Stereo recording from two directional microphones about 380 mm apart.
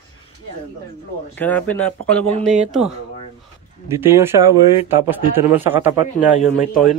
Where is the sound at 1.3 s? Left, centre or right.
Centre.